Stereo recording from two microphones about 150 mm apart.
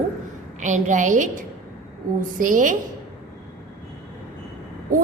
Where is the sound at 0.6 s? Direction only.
55° right (ahead or behind).